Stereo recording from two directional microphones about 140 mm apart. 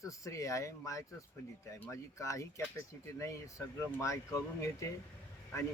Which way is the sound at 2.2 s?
20° left (ahead or behind).